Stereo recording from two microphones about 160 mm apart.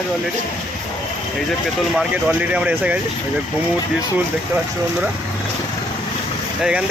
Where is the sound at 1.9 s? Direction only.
10° right (ahead or behind).